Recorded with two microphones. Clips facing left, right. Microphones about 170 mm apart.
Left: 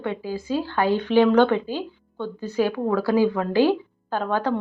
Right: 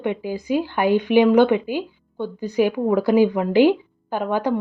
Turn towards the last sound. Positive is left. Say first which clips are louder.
# right 2 dB
turn(degrees=-10)  # may be behind; listen again after turning